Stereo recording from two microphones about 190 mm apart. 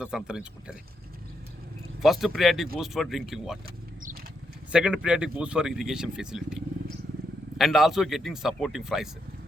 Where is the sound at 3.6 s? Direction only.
50° right (ahead or behind).